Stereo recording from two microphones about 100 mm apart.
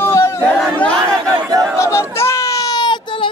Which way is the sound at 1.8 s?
25° left (ahead or behind).